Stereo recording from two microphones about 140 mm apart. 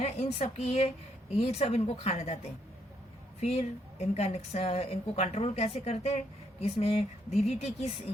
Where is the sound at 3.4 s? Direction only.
50° left (ahead or behind).